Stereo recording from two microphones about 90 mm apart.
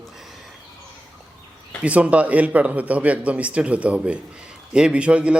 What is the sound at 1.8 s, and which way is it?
A man's voice, 15° right (ahead or behind).